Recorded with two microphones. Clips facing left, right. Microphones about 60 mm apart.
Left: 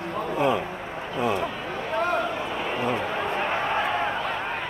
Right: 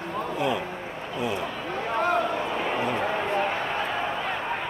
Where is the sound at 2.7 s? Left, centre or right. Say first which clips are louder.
Left 2 dB; centre.